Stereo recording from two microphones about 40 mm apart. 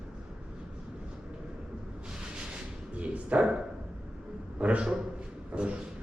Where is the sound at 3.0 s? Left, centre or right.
Right.